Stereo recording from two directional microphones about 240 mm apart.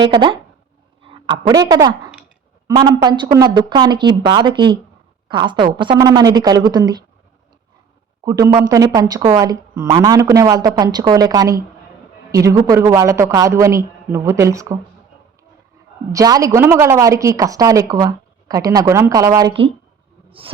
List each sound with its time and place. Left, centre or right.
0.0 s a woman's voice: centre
8.2 s a woman's voice: centre
16.1 s a woman's voice: centre